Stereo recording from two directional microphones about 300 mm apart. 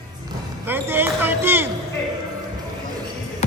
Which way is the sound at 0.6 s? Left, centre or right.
Centre.